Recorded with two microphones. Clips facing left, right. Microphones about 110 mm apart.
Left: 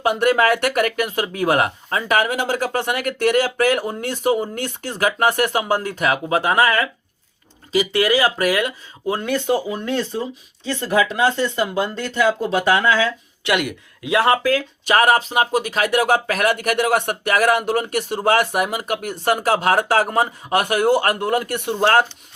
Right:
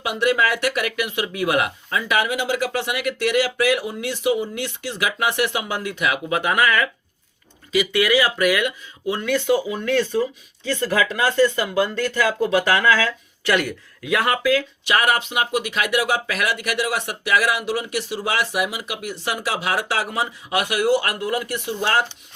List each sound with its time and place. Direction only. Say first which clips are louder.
0.0 s speech: left 4 dB; 45° left (ahead or behind)
9.8 s speech: right 3 dB; 25° left (ahead or behind)
14.5 s speech: left 2 dB; 40° left (ahead or behind)